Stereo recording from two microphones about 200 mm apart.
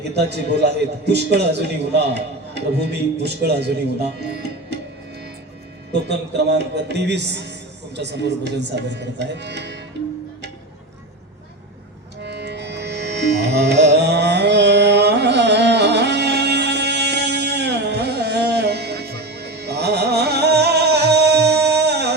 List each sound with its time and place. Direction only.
0.3 s a man's voice: 55° right (ahead or behind)
4.2 s music: 55° right (ahead or behind)
5.9 s a man's voice: 55° right (ahead or behind)
12.2 s music: 55° right (ahead or behind)